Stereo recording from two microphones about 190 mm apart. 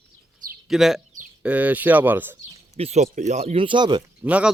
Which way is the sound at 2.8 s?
35° right (ahead or behind).